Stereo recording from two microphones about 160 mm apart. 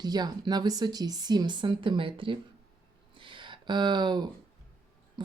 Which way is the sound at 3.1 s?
30° right (ahead or behind).